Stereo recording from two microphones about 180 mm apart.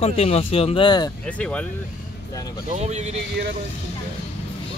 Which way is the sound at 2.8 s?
40° right (ahead or behind).